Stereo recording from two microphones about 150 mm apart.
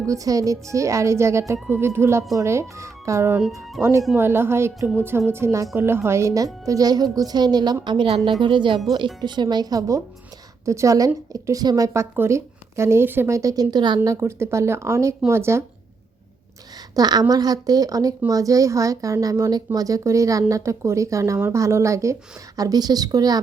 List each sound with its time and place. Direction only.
0.0 s a woman's voice: 20° right (ahead or behind)
16.9 s a woman's voice: 25° right (ahead or behind)